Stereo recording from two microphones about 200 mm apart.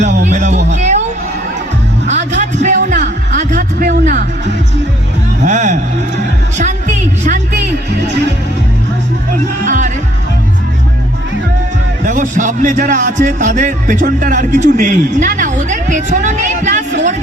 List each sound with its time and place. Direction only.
0.0 s a man's voice: 35° right (ahead or behind)
2.0 s a sound: 35° right (ahead or behind)
5.5 s speech: 40° right (ahead or behind)
9.6 s speech: 40° right (ahead or behind)
12.0 s speech: 40° right (ahead or behind)